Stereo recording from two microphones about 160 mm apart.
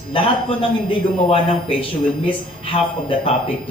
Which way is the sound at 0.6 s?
35° left (ahead or behind).